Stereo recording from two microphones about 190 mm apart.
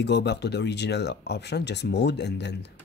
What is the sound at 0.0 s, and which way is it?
Speech, 65° left (ahead or behind).